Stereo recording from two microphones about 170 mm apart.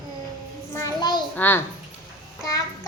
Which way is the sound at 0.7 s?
20° left (ahead or behind).